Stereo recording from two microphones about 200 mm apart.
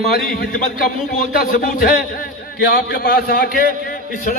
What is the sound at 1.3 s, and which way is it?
A man's voice, 45° left (ahead or behind).